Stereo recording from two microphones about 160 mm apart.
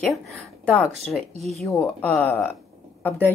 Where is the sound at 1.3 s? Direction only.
45° right (ahead or behind).